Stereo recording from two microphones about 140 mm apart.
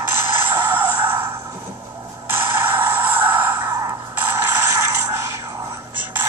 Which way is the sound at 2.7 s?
15° right (ahead or behind).